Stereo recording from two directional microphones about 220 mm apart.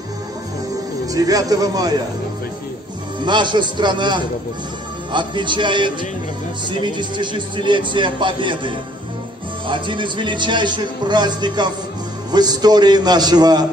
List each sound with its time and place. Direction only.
1.0 s speech: 15° right (ahead or behind)
3.3 s a man's voice: 20° right (ahead or behind)